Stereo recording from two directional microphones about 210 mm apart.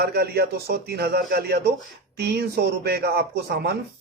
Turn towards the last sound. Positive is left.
turn(degrees=-50)  # may be behind; listen again after turning